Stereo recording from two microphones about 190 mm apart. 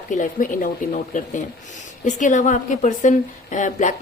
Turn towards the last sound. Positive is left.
turn(degrees=40)  # may be behind; listen again after turning